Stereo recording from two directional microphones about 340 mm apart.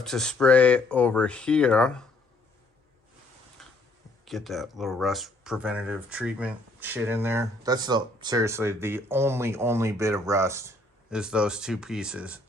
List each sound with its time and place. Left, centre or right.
0.0 s speech: centre
3.6 s tick-tock: centre
4.3 s speech: centre